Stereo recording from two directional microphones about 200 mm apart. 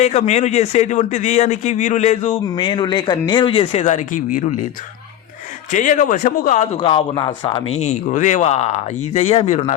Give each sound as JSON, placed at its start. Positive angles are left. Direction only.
{"t": 0.0, "sound": "speech", "side_deg": 35}
{"t": 5.7, "sound": "speech", "side_deg": 40}